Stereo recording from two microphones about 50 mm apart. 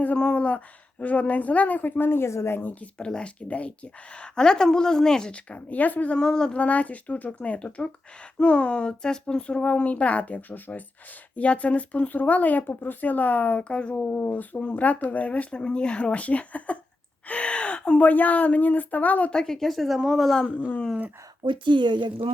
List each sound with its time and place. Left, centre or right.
0.0 s a woman's voice: left
3.0 s speech: centre
4.4 s a woman's voice: centre
5.3 s speech: left
6.1 s a woman's voice: centre
6.6 s a woman's voice: left
14.1 s speech: left
17.2 s gasp: left
18.0 s a woman's voice: left
19.3 s a woman's voice: centre
20.6 s a woman's voice: left